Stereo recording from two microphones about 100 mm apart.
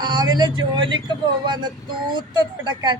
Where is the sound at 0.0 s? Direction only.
45° right (ahead or behind).